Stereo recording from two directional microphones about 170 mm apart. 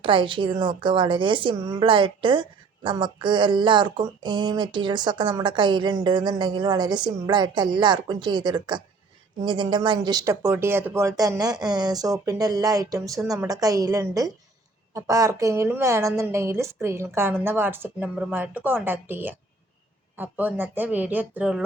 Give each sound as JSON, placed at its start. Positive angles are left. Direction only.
{"t": 0.0, "sound": "a woman's voice", "side_deg": -30}